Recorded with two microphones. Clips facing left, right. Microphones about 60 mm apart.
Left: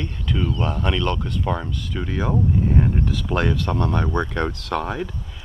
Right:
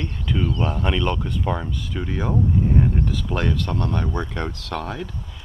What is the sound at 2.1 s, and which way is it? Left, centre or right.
Speech, centre.